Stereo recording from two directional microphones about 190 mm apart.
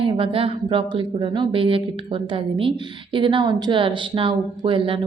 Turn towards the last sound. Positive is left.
turn(degrees=-30)  # may be behind; listen again after turning